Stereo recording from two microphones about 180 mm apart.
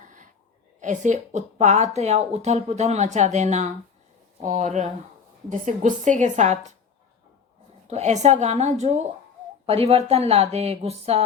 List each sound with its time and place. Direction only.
0.0 s a sound: 45° right (ahead or behind)
0.8 s a woman's voice: 40° right (ahead or behind)
7.9 s speech: 40° right (ahead or behind)